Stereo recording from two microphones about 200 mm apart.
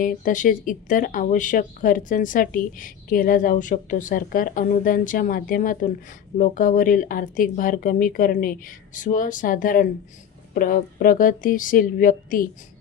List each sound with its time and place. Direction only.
0.0 s speech: 40° left (ahead or behind)